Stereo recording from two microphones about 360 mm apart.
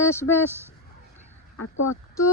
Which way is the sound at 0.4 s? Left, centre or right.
Centre.